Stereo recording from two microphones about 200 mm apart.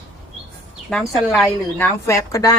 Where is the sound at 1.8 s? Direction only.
15° left (ahead or behind).